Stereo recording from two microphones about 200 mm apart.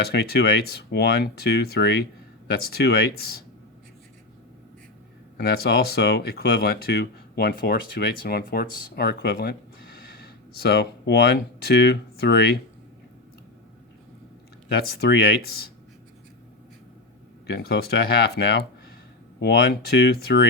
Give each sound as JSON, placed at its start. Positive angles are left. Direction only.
{"t": 0.1, "sound": "speech", "side_deg": 55}
{"t": 5.4, "sound": "speech", "side_deg": 50}
{"t": 10.6, "sound": "speech", "side_deg": 50}
{"t": 14.7, "sound": "speech", "side_deg": 50}
{"t": 17.4, "sound": "speech", "side_deg": 55}